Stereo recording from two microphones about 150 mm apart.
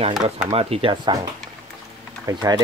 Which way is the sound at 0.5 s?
40° right (ahead or behind).